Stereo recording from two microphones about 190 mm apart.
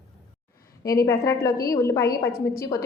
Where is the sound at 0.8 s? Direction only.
15° left (ahead or behind).